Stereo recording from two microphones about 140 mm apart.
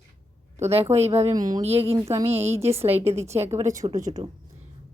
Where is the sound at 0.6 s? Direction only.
50° right (ahead or behind).